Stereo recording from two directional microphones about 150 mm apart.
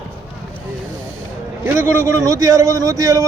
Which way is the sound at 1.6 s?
15° right (ahead or behind).